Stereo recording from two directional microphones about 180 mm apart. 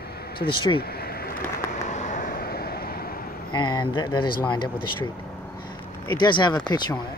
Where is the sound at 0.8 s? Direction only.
60° left (ahead or behind).